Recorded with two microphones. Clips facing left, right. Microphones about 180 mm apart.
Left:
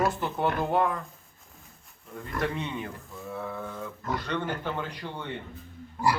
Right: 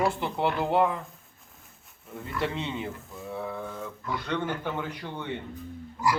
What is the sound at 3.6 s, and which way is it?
Speech, 10° right (ahead or behind).